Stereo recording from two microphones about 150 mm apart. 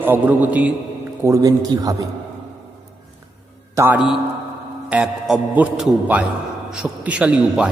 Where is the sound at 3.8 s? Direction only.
15° right (ahead or behind).